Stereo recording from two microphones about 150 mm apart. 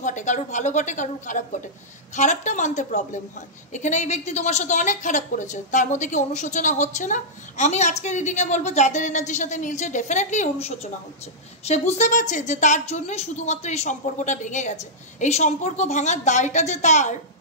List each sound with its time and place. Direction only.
0.0 s a woman's voice: 55° left (ahead or behind)